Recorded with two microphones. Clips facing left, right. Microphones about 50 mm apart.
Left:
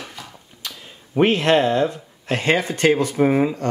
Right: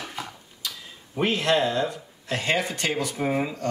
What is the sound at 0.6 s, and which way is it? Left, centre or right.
Speech, left.